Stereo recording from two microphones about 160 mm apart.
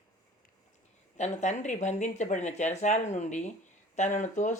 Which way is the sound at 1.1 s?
45° left (ahead or behind).